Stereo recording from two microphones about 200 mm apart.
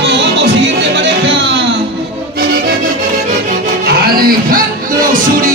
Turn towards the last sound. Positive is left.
turn(degrees=-45)  # may be behind; listen again after turning